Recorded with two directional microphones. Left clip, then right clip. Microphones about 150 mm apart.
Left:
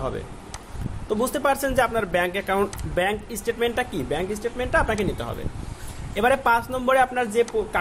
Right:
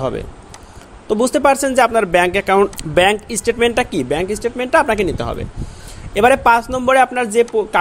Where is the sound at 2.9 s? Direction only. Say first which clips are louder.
Right 12 dB; 70° right (ahead or behind).